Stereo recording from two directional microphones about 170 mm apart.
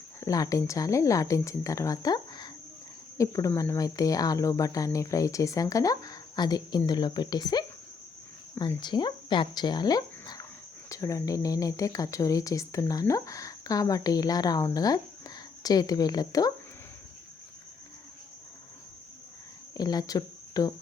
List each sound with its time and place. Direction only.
0.2 s speech: 20° left (ahead or behind)
8.8 s speech: 25° left (ahead or behind)
19.7 s speech: 25° left (ahead or behind)